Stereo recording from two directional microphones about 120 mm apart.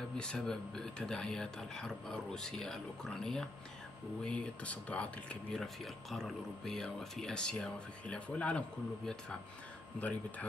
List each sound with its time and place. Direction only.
0.2 s speech: 5° left (ahead or behind)